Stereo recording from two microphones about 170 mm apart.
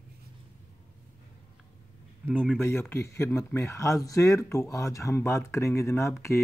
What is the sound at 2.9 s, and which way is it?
Speech, 15° left (ahead or behind).